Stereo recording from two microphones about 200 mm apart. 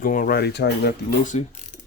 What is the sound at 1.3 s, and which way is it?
Speech, 35° left (ahead or behind).